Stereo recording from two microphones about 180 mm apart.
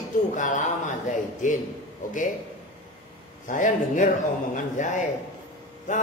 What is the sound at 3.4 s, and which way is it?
A man's voice, 45° left (ahead or behind).